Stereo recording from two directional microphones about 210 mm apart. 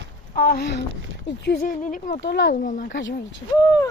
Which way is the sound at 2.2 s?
60° left (ahead or behind).